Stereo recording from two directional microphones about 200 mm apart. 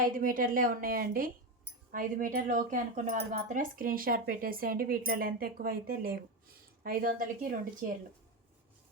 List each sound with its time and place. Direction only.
0.2 s speech: 45° right (ahead or behind)